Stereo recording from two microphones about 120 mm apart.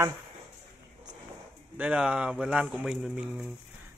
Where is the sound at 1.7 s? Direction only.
10° right (ahead or behind).